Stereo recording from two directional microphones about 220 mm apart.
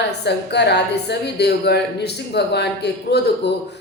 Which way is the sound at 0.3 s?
50° left (ahead or behind).